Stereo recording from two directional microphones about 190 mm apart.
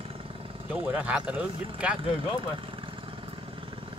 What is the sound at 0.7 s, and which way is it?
Speech, 5° right (ahead or behind).